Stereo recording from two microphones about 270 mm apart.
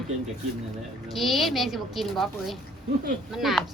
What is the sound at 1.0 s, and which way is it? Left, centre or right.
A woman's voice, centre.